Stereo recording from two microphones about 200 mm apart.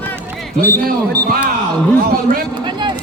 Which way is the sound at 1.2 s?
50° right (ahead or behind).